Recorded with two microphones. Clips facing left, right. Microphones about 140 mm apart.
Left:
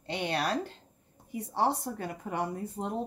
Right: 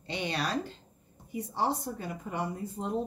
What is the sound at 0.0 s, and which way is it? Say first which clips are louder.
Speech: left 2 dB; 55° left (ahead or behind).